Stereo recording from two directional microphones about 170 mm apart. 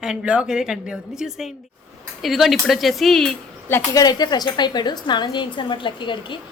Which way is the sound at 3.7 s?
20° left (ahead or behind).